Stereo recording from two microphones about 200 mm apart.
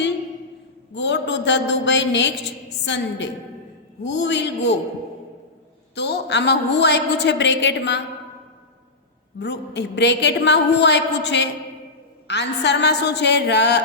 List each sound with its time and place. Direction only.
0.9 s a woman's voice: 60° left (ahead or behind)
5.9 s a woman's voice: 60° left (ahead or behind)
9.4 s a woman's voice: 60° left (ahead or behind)